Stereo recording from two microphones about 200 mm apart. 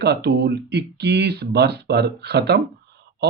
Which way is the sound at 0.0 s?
55° right (ahead or behind).